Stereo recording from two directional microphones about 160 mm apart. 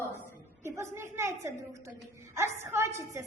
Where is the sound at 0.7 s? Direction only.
15° right (ahead or behind).